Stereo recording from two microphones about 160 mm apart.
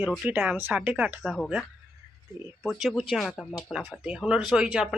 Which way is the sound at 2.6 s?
Centre (ahead or behind).